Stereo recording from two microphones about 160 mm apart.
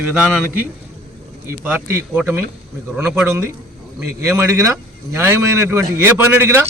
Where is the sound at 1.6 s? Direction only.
15° right (ahead or behind).